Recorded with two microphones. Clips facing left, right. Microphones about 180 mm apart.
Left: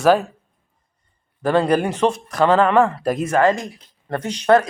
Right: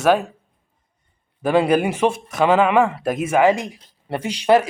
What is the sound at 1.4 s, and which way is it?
Speech, 5° right (ahead or behind).